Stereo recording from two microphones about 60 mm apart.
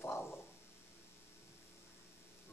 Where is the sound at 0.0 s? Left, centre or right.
Left.